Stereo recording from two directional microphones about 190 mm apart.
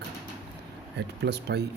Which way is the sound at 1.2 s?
60° right (ahead or behind).